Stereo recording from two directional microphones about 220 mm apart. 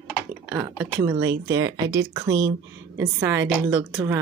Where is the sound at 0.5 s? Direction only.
10° right (ahead or behind).